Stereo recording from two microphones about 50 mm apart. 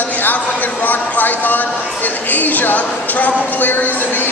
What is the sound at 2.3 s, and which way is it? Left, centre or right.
A man's voice, left.